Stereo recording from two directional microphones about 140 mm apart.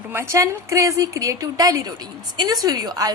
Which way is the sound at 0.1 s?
20° right (ahead or behind).